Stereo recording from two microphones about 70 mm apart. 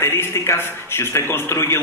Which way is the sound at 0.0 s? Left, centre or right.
Left.